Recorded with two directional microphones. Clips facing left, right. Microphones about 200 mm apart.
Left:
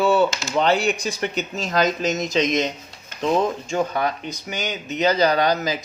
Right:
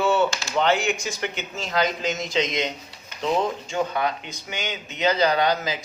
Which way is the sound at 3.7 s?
40° left (ahead or behind).